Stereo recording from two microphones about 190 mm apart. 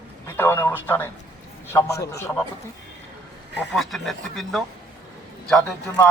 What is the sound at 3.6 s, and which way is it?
Speech, centre (ahead or behind).